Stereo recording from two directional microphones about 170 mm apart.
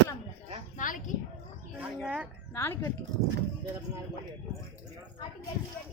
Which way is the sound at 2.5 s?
15° left (ahead or behind).